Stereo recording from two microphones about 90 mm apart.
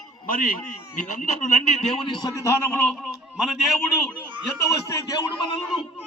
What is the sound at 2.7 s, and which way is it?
Speech, 15° left (ahead or behind).